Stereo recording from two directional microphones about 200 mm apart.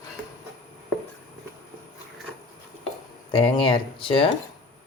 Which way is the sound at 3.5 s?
25° left (ahead or behind).